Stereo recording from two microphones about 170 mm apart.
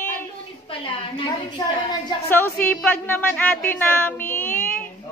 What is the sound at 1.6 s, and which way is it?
Speech, 25° left (ahead or behind).